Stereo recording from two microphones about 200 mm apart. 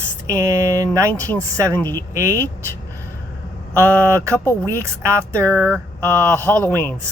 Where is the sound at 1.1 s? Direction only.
10° left (ahead or behind).